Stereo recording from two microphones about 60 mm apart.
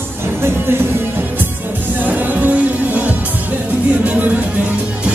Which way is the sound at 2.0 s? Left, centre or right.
Right.